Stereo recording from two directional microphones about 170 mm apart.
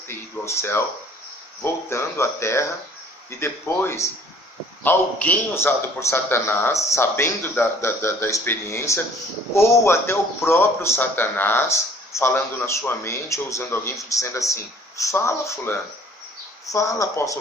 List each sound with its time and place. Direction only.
0.1 s a man's voice: 15° left (ahead or behind)